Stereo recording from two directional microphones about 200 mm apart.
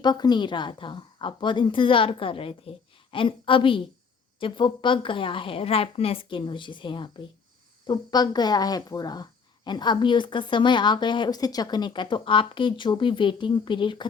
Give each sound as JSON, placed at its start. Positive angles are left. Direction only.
{"t": 0.0, "sound": "a woman's voice", "side_deg": 20}